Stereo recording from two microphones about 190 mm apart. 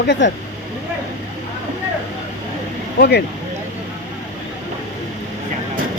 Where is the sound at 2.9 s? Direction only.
60° left (ahead or behind).